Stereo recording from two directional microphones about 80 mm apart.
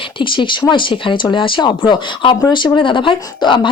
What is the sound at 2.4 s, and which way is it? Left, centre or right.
Speech, left.